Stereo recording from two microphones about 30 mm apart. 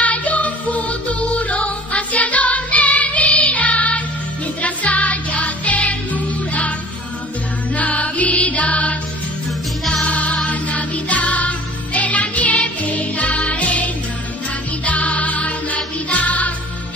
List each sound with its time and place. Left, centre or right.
0.0 s music: left
7.7 s music: left
10.0 s music: left
14.9 s music: left